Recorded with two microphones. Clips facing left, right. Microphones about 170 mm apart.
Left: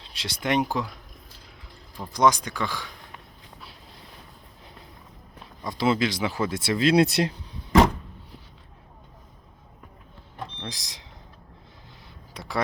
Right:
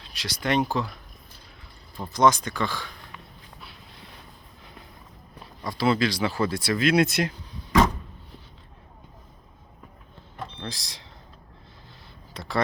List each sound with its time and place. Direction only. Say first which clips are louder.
0.1 s speech: even; 25° left (ahead or behind)
2.1 s speech: right 1 dB; 10° left (ahead or behind)
5.6 s speech: even; 20° left (ahead or behind)
10.6 s speech: right 1 dB; 15° left (ahead or behind)
12.3 s a sound: right 2 dB; 15° left (ahead or behind)